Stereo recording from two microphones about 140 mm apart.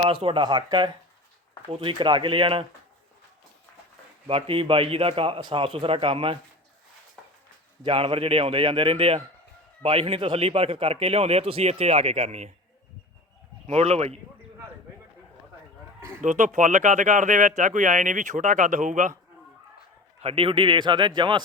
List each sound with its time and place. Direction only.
0.0 s a man's voice: 40° right (ahead or behind)
4.3 s a man's voice: 40° right (ahead or behind)
7.9 s a man's voice: 40° right (ahead or behind)
13.7 s a man's voice: 50° right (ahead or behind)
16.2 s speech: 60° right (ahead or behind)
20.2 s a man's voice: 40° right (ahead or behind)